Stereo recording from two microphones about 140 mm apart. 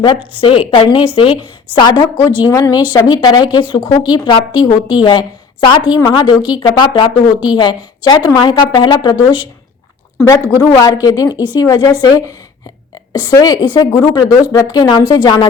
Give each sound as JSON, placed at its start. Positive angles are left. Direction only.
{"t": 0.0, "sound": "a woman's voice", "side_deg": 35}
{"t": 13.3, "sound": "a woman's voice", "side_deg": 25}